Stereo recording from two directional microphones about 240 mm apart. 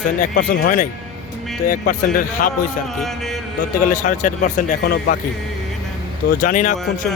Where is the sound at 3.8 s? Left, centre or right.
Left.